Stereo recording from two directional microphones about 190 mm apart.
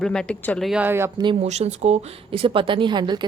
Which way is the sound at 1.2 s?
30° right (ahead or behind).